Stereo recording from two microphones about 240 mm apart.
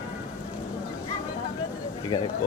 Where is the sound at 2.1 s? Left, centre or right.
Centre.